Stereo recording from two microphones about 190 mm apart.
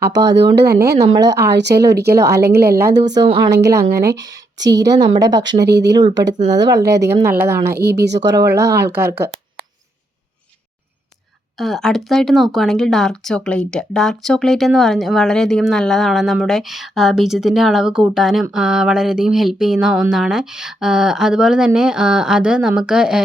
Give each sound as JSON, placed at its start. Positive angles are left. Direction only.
{"t": 0.1, "sound": "a woman's voice", "side_deg": -20}
{"t": 0.3, "sound": "speech", "side_deg": -60}
{"t": 0.9, "sound": "a woman's voice", "side_deg": -20}
{"t": 1.3, "sound": "speech", "side_deg": -65}
{"t": 4.9, "sound": "a woman's voice", "side_deg": -20}
{"t": 5.4, "sound": "speech", "side_deg": -65}
{"t": 6.0, "sound": "a woman's voice", "side_deg": -20}
{"t": 7.7, "sound": "speech", "side_deg": -55}
{"t": 8.4, "sound": "a woman's voice", "side_deg": -15}
{"t": 11.5, "sound": "speech", "side_deg": 0}